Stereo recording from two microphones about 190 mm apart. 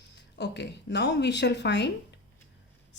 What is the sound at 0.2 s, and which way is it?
Speech, 65° left (ahead or behind).